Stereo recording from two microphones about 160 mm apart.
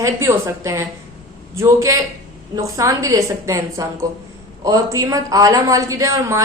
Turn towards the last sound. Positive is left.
turn(degrees=-20)  # may be behind; listen again after turning